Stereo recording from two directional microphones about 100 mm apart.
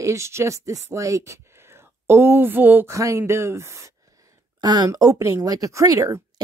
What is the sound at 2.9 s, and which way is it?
Speech, 30° right (ahead or behind).